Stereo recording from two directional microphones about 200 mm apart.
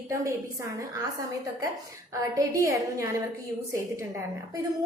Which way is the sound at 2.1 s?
15° right (ahead or behind).